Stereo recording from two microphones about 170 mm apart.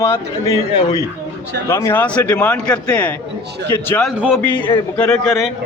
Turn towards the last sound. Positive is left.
turn(degrees=0)  # may be behind; listen again after turning